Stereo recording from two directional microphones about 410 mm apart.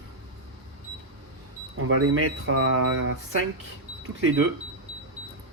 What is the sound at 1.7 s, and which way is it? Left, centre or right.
Speech, right.